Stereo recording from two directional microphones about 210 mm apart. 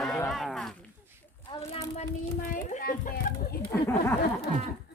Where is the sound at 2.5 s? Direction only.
40° left (ahead or behind).